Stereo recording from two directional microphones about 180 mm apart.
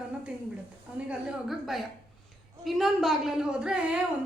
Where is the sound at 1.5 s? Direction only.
Centre (ahead or behind).